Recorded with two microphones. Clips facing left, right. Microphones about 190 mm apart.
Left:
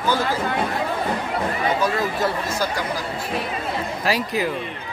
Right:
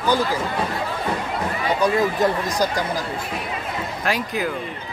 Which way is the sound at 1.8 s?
15° right (ahead or behind).